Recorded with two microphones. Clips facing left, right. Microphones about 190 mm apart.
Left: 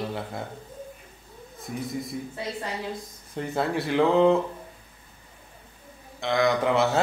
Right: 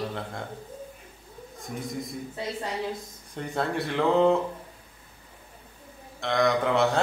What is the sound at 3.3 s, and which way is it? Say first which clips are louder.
Speech: left 2 dB; centre (ahead or behind).